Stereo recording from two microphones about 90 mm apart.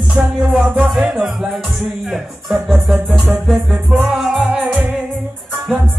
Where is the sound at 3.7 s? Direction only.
15° right (ahead or behind).